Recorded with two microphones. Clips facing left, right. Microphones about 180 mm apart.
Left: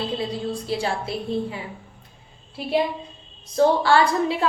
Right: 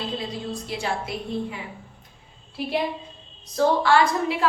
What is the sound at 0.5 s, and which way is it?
A woman's voice, 30° left (ahead or behind).